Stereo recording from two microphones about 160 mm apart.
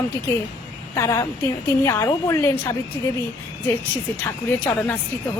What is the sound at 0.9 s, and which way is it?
A woman's voice, 15° left (ahead or behind).